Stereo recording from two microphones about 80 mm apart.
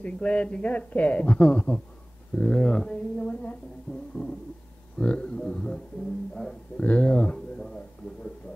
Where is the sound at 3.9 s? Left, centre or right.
Centre.